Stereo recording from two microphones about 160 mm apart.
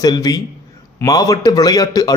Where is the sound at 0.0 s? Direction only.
25° left (ahead or behind).